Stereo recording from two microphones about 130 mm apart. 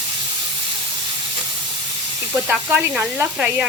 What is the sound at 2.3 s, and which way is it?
Sizzle, 15° right (ahead or behind).